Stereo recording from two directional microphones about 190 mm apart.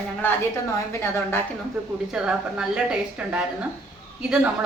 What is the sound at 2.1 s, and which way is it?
Speech, 5° right (ahead or behind).